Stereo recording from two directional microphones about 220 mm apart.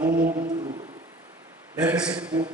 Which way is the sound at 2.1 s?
5° right (ahead or behind).